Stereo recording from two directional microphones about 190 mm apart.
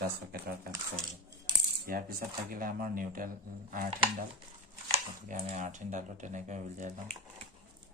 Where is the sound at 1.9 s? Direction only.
50° right (ahead or behind).